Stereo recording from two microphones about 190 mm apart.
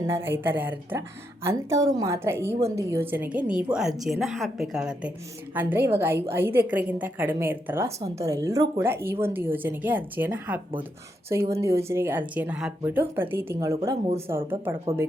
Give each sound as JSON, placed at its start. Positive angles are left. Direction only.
{"t": 0.0, "sound": "a woman's voice", "side_deg": -15}